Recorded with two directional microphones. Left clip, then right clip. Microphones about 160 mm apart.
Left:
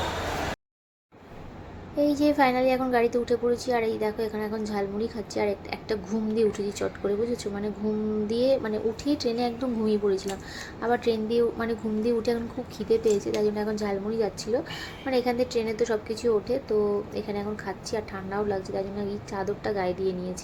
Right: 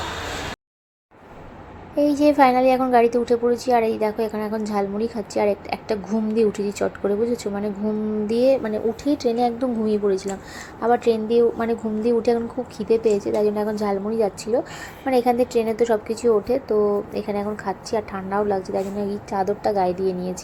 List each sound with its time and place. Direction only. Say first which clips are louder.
2.0 s a woman's voice: right 6 dB; 25° right (ahead or behind)